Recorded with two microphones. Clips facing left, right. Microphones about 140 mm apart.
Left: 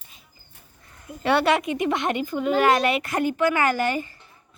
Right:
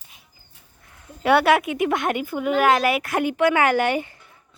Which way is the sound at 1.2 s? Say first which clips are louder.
Right 3 dB; 5° right (ahead or behind).